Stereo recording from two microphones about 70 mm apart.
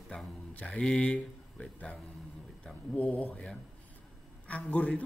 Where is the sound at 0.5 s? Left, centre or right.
Centre.